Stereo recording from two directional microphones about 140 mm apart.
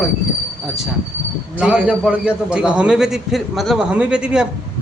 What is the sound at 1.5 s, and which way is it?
A man's voice, 5° right (ahead or behind).